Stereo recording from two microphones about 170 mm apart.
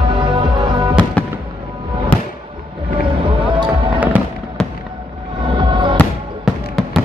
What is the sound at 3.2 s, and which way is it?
Run, 30° right (ahead or behind).